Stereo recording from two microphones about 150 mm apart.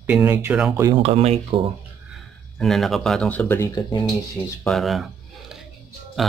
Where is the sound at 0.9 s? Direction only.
40° right (ahead or behind).